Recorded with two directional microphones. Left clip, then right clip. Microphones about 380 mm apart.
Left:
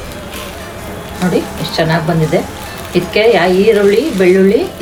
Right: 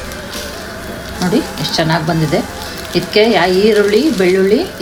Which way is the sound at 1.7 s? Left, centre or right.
Centre.